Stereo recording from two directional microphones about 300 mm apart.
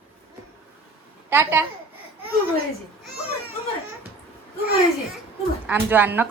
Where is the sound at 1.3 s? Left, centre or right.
Centre.